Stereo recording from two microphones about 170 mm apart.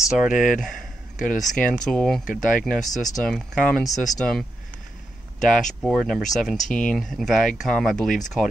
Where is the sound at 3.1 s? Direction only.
5° left (ahead or behind).